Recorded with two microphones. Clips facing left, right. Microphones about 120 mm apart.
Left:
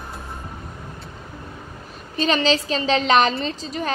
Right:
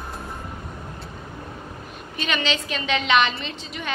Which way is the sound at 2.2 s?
35° left (ahead or behind).